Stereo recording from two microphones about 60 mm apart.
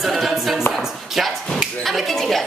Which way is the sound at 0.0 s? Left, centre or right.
Centre.